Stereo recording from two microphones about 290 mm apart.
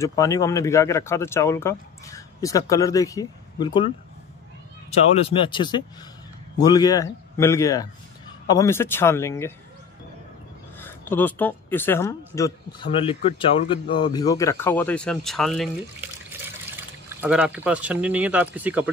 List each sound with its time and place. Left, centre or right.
0.0 s speech: centre
4.9 s speech: centre
10.8 s speech: centre